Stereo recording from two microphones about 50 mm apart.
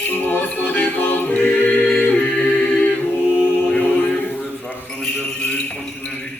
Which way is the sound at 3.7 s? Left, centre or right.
Left.